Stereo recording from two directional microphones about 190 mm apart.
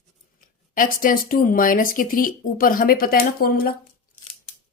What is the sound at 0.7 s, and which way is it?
A woman's voice, 45° left (ahead or behind).